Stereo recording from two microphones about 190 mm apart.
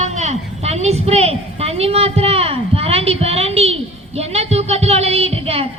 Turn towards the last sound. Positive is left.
turn(degrees=-30)  # may be behind; listen again after turning